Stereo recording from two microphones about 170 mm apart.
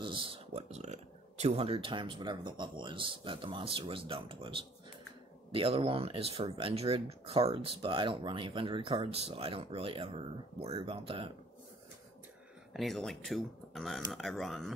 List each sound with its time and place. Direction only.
0.0 s speech: 30° right (ahead or behind)
12.7 s speech: centre (ahead or behind)